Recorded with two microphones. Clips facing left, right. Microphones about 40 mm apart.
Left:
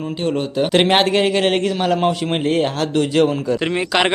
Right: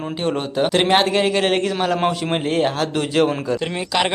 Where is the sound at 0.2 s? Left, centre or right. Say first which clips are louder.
Left 1 dB; centre.